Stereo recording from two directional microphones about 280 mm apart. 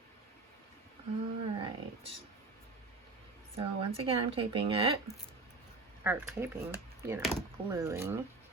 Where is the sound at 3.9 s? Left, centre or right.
Centre.